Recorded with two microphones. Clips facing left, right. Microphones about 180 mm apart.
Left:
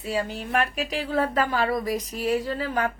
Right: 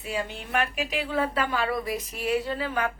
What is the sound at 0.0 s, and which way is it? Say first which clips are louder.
A woman's voice: left 4 dB; 40° left (ahead or behind).